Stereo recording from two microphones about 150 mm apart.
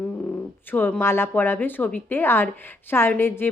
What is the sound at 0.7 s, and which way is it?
A woman's voice, 15° left (ahead or behind).